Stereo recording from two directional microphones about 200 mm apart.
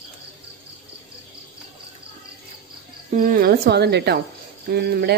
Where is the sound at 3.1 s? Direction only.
45° right (ahead or behind).